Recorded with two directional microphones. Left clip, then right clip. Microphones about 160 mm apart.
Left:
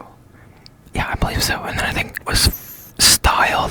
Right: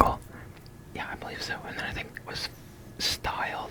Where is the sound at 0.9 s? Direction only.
30° left (ahead or behind).